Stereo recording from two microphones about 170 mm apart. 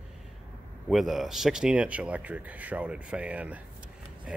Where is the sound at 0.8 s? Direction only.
Centre (ahead or behind).